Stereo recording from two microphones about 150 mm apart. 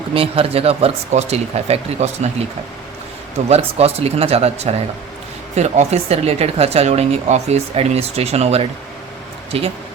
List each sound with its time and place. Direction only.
0.1 s a woman's voice: 40° right (ahead or behind)
3.5 s a woman's voice: 40° right (ahead or behind)